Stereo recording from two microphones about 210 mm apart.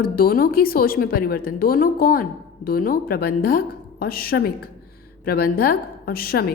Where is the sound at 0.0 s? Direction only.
45° left (ahead or behind).